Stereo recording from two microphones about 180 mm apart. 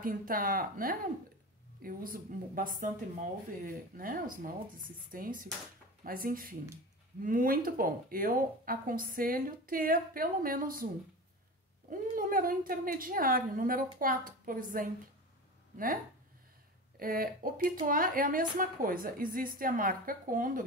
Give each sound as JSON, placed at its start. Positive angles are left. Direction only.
{"t": 0.0, "sound": "speech", "side_deg": -50}
{"t": 11.9, "sound": "speech", "side_deg": -50}
{"t": 17.0, "sound": "speech", "side_deg": -50}